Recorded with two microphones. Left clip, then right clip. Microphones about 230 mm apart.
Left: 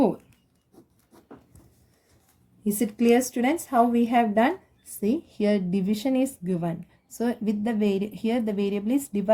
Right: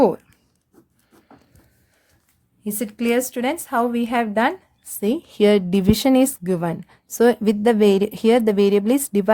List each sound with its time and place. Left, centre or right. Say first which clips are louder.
2.6 s a woman's voice: left 1 dB; right